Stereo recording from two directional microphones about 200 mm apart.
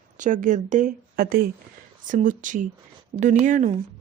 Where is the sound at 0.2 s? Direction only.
40° right (ahead or behind).